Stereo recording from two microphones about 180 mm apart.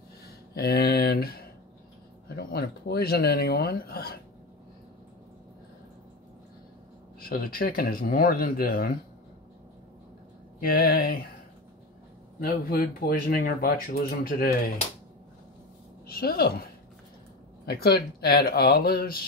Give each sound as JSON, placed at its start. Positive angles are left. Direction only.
{"t": 0.6, "sound": "speech", "side_deg": 60}
{"t": 7.2, "sound": "speech", "side_deg": 55}
{"t": 10.6, "sound": "speech", "side_deg": 55}
{"t": 12.4, "sound": "speech", "side_deg": 55}
{"t": 16.1, "sound": "speech", "side_deg": 60}
{"t": 17.6, "sound": "speech", "side_deg": 60}